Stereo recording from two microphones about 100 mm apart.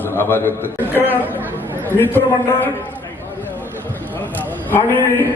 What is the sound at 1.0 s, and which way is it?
Speech, 20° right (ahead or behind).